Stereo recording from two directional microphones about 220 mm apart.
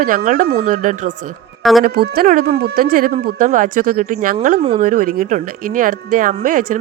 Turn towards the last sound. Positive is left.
turn(degrees=-40)  # may be behind; listen again after turning